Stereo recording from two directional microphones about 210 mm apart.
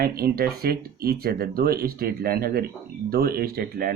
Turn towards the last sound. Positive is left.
turn(degrees=-45)  # may be behind; listen again after turning